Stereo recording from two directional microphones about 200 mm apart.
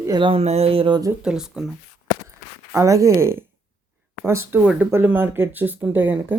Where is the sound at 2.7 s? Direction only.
15° right (ahead or behind).